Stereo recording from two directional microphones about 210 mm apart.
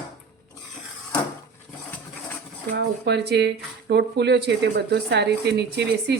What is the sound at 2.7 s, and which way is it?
Speech, 55° right (ahead or behind).